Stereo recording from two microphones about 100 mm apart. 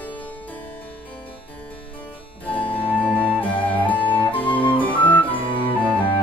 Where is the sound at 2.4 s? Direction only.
15° left (ahead or behind).